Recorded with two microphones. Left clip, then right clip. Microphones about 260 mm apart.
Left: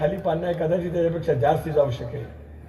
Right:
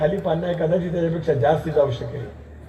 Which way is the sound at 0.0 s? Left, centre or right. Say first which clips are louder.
Right 2 dB; left.